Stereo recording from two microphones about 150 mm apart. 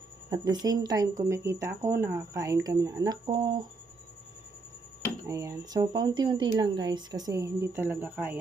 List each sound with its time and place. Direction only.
0.3 s speech: 25° right (ahead or behind)
5.2 s speech: 20° right (ahead or behind)